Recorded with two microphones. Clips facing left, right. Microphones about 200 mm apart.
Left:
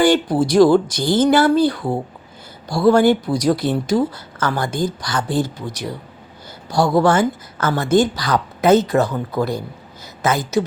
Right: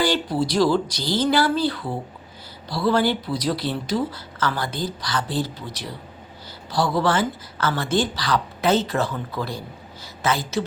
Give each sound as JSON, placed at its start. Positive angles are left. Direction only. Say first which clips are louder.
{"t": 0.0, "sound": "speech", "louder": "left 7 dB", "side_deg": 50}